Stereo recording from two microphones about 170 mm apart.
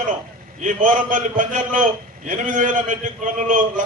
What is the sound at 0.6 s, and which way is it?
A man's voice, 50° right (ahead or behind).